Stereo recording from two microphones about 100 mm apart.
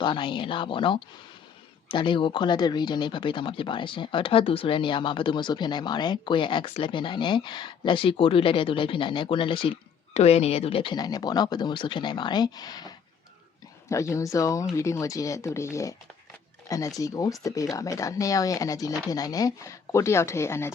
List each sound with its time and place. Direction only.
0.0 s speech: 55° left (ahead or behind)
10.2 s speech: 90° left; by 10.9 s 70° left (ahead or behind)
10.9 s speech: 40° left (ahead or behind)
13.9 s speech: 30° left (ahead or behind)